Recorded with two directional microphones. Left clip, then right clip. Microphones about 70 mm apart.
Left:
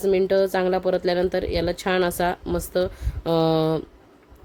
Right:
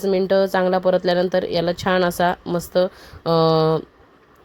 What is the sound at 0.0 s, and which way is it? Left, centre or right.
Speech, centre.